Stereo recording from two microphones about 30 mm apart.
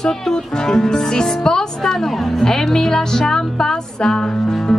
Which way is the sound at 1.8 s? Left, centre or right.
Centre.